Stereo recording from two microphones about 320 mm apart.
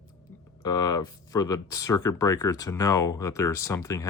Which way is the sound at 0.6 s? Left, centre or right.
Centre.